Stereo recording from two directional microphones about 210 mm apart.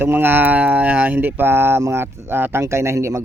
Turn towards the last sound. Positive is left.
turn(degrees=-15)  # may be behind; listen again after turning